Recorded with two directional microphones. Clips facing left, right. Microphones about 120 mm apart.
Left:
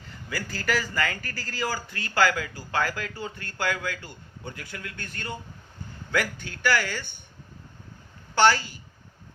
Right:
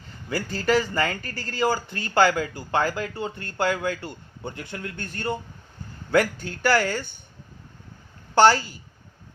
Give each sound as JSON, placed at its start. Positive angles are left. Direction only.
{"t": 0.3, "sound": "speech", "side_deg": -25}
{"t": 8.4, "sound": "speech", "side_deg": -35}